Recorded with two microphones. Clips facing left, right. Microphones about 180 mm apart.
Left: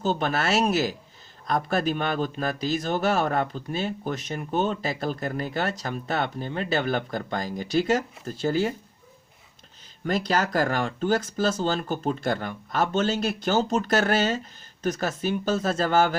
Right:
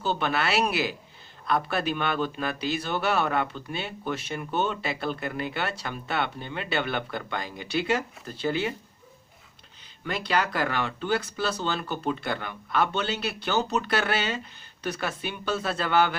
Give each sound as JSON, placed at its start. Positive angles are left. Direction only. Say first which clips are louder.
{"t": 0.0, "sound": "a man's voice", "louder": "left 2 dB", "side_deg": 40}
{"t": 10.0, "sound": "speech", "louder": "left 3 dB", "side_deg": 45}